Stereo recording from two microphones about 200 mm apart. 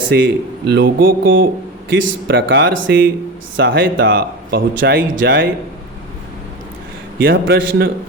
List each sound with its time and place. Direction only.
0.1 s speech: 55° right (ahead or behind)
1.9 s speech: 60° right (ahead or behind)
7.2 s speech: 50° right (ahead or behind)